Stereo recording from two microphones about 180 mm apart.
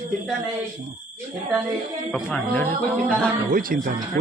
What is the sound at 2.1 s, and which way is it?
Speech, 5° left (ahead or behind).